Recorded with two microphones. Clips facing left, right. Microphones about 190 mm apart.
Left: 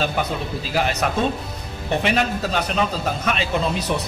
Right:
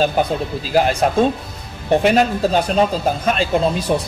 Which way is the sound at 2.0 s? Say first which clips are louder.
Right 6 dB; 40° right (ahead or behind).